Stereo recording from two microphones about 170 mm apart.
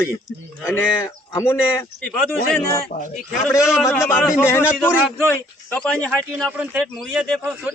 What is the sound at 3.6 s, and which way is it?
Speech, centre (ahead or behind).